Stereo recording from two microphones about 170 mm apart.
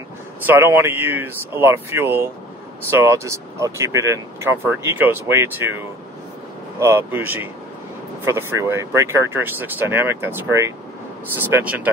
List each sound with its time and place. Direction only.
0.5 s speech: 10° right (ahead or behind)
6.8 s speech: 15° right (ahead or behind)